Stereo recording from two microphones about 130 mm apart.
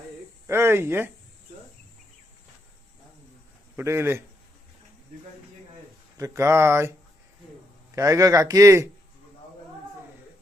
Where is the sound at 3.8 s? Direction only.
20° right (ahead or behind).